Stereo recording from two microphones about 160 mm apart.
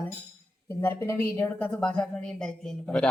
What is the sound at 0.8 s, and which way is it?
A woman's voice, 15° left (ahead or behind).